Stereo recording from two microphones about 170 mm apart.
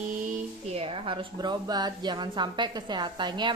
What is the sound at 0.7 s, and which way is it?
A woman's voice, 35° right (ahead or behind).